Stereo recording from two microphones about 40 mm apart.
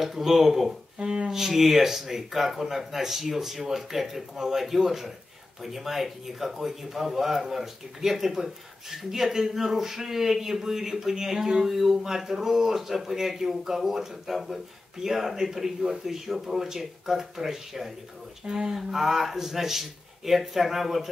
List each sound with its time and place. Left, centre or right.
0.0 s speech: centre
0.9 s speech: right
1.3 s speech: centre